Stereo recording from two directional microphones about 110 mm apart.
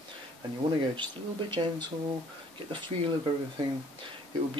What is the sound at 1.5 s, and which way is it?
Speech, 45° right (ahead or behind).